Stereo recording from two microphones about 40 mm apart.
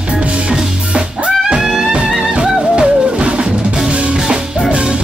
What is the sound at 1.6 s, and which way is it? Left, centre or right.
Music, centre.